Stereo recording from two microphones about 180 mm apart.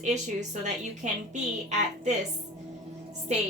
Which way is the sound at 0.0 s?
40° right (ahead or behind).